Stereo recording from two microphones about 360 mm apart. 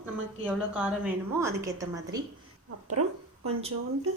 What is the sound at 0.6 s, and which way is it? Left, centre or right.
A woman's voice, centre.